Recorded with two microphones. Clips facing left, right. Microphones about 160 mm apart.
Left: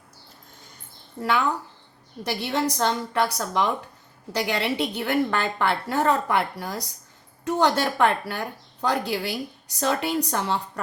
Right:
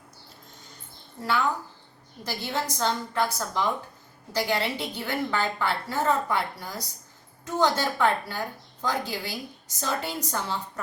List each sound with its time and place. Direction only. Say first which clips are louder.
2.2 s a woman's voice: left 5 dB; 70° left (ahead or behind)